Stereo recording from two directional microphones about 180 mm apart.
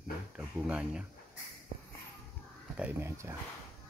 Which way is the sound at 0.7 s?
5° right (ahead or behind).